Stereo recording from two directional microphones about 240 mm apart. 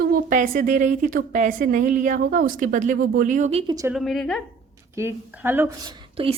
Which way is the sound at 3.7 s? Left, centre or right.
Centre.